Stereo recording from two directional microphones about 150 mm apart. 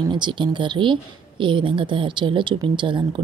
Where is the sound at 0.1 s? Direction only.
30° right (ahead or behind).